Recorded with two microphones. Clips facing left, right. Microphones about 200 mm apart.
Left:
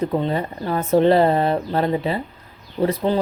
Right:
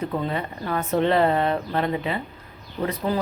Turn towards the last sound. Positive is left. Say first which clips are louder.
# left 5 dB
turn(degrees=30)  # may be behind; listen again after turning